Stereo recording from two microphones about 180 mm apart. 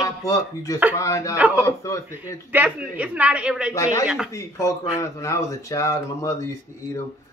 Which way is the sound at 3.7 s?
15° left (ahead or behind).